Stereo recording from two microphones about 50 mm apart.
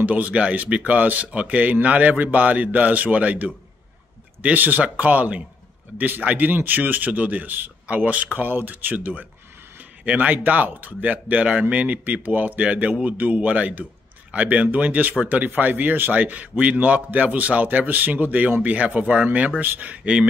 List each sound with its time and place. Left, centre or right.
0.0 s speech: right
19.6 s speech: right